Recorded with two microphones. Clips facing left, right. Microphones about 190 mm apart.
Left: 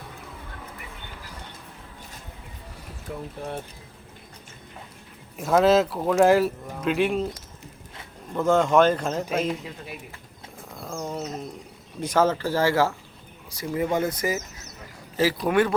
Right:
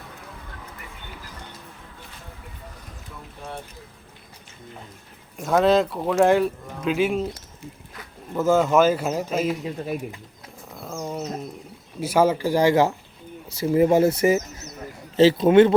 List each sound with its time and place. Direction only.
5.4 s speech: centre (ahead or behind)
8.3 s speech: 5° right (ahead or behind)
10.7 s roaring cats: 5° right (ahead or behind)
11.9 s speech: 10° right (ahead or behind)